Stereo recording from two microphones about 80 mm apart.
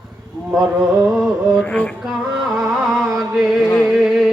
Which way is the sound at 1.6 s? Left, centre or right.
Centre.